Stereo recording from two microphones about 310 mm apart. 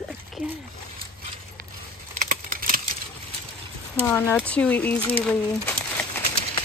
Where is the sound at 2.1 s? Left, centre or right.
Right.